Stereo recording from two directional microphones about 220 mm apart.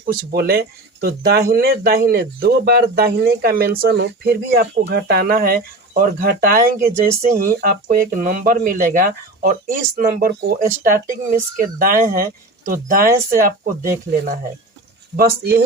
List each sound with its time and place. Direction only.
0.0 s speech: 45° right (ahead or behind)